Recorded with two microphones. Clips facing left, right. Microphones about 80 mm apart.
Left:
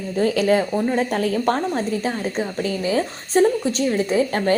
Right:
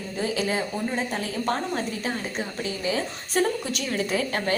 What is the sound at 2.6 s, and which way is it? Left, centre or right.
A woman's voice, left.